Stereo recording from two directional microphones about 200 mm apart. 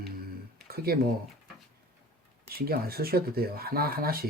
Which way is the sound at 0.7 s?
50° right (ahead or behind).